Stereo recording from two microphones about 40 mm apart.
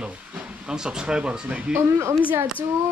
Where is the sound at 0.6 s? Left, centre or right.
Centre.